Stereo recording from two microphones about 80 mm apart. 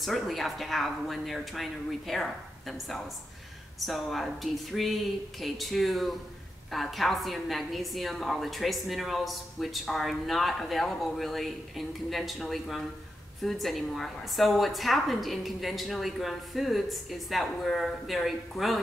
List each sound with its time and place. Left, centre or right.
0.0 s a woman's voice: centre